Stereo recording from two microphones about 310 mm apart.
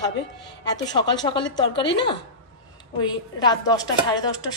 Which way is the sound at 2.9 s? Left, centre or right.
Centre.